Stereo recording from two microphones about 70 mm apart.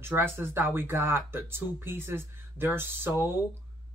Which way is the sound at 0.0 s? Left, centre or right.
Right.